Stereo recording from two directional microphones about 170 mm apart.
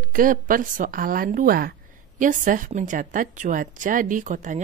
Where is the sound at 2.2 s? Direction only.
50° right (ahead or behind).